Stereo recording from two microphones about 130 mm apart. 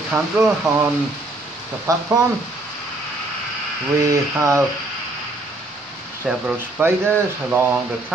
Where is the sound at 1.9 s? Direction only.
25° right (ahead or behind).